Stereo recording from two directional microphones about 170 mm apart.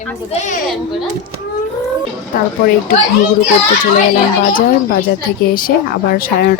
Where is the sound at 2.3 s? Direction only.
55° left (ahead or behind).